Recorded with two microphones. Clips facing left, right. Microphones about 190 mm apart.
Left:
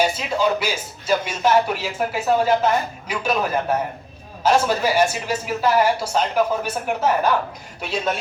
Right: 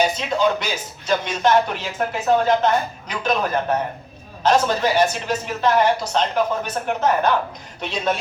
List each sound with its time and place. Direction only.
0.0 s speech: 5° left (ahead or behind)